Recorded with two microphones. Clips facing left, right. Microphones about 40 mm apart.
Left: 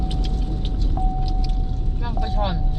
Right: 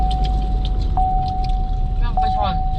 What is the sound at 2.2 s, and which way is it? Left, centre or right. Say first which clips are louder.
Vehicle: right 9 dB; right.